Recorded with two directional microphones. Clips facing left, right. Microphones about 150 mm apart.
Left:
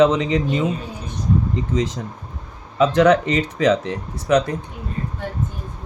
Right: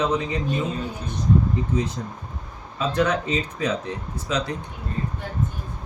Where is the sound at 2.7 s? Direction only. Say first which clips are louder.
Left 8 dB; 80° left; by 4.5 s 60° left (ahead or behind).